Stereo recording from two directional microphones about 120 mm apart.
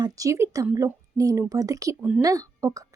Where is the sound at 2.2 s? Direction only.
30° right (ahead or behind).